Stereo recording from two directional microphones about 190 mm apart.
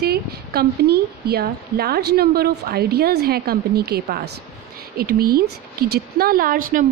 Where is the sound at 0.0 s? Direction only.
55° right (ahead or behind).